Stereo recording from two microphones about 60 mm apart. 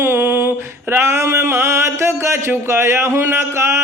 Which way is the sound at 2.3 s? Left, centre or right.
Right.